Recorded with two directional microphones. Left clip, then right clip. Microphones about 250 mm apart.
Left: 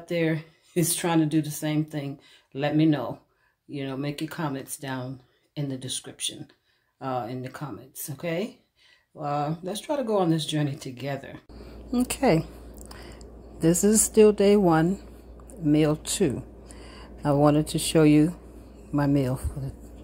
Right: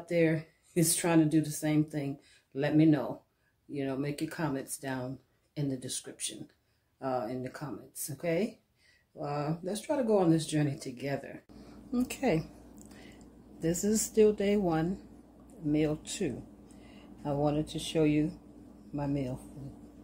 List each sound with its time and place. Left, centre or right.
0.0 s speech: centre
11.9 s a sound: left
13.6 s a woman's voice: left